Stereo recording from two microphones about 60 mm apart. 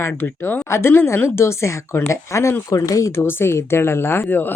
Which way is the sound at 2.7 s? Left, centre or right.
Left.